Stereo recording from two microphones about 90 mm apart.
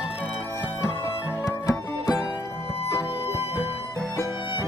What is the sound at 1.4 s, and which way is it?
Music, 40° left (ahead or behind).